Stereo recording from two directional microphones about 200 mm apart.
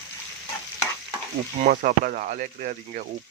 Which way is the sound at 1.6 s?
40° right (ahead or behind).